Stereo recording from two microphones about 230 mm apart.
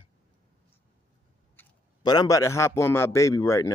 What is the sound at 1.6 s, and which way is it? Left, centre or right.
A man's voice, centre.